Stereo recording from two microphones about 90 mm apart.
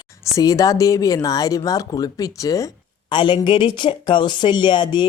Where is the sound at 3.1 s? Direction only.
65° left (ahead or behind).